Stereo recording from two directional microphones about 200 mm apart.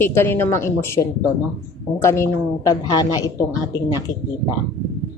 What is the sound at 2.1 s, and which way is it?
A woman's voice, 15° left (ahead or behind).